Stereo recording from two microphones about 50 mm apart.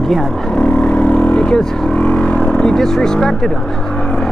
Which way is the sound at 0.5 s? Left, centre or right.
Left.